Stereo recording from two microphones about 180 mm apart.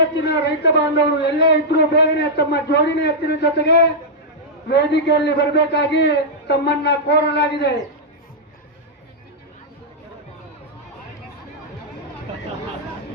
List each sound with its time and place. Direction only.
0.3 s a man's voice: 70° left (ahead or behind)